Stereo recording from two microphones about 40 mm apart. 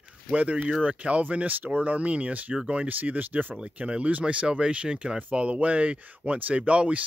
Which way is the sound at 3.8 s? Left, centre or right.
Right.